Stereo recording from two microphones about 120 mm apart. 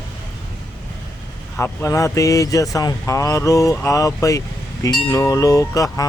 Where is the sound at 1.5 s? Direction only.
20° left (ahead or behind).